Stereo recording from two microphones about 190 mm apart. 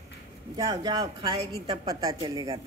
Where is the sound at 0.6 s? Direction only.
25° right (ahead or behind).